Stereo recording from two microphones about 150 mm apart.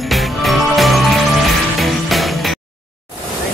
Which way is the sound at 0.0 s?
Centre (ahead or behind).